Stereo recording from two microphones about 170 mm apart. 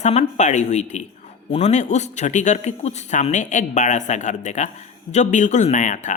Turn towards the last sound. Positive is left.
turn(degrees=45)  # may be behind; listen again after turning